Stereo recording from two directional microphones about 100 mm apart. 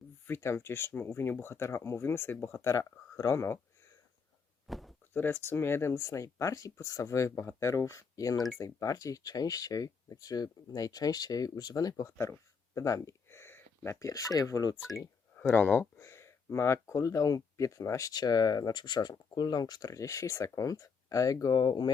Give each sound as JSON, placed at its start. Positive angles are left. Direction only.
{"t": 0.3, "sound": "speech", "side_deg": 25}
{"t": 4.6, "sound": "a sound", "side_deg": 0}
{"t": 5.1, "sound": "speech", "side_deg": 20}
{"t": 15.4, "sound": "speech", "side_deg": 20}